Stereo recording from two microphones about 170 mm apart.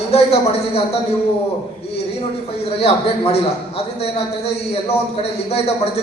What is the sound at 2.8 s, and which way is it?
Speech, 35° left (ahead or behind).